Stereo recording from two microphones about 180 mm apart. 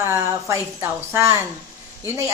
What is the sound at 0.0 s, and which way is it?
Speech, 15° right (ahead or behind).